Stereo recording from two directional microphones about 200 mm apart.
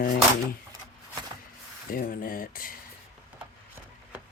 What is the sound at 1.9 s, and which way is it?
Speech, 45° left (ahead or behind).